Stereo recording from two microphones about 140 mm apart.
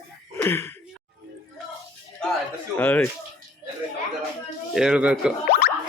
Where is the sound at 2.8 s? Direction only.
15° left (ahead or behind).